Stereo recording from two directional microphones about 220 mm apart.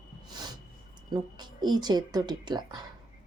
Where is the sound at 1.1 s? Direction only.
20° right (ahead or behind).